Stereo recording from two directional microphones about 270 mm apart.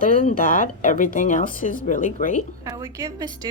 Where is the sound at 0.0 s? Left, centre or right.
Left.